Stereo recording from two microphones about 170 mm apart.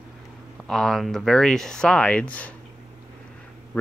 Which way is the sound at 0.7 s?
5° left (ahead or behind).